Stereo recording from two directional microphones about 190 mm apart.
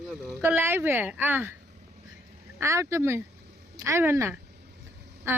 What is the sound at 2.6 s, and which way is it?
Speech, 15° right (ahead or behind).